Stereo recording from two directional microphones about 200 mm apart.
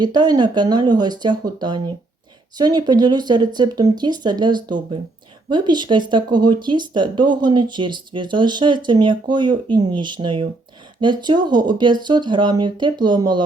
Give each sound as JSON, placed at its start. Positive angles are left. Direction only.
{"t": 0.0, "sound": "speech", "side_deg": -20}